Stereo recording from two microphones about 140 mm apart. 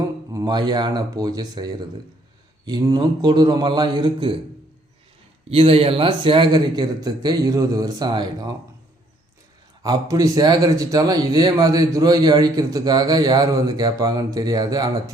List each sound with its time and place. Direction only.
0.3 s a man's voice: 30° right (ahead or behind)
5.5 s speech: 45° right (ahead or behind)
9.8 s a man's voice: 25° right (ahead or behind)